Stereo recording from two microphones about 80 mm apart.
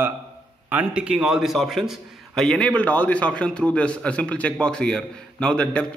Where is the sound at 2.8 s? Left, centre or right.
Centre.